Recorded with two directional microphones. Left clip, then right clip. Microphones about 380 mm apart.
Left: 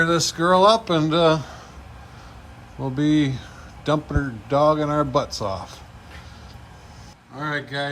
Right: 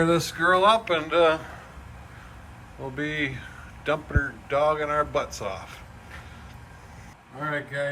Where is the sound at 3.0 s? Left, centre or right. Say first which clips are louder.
Left 8 dB; centre.